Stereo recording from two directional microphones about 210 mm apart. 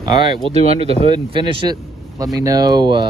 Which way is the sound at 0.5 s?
30° right (ahead or behind).